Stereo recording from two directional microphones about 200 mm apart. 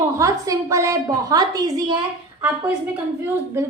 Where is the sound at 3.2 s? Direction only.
10° right (ahead or behind).